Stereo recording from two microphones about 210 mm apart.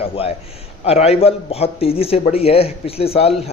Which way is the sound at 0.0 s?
25° left (ahead or behind).